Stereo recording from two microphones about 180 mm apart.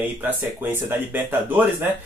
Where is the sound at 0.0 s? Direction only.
10° right (ahead or behind).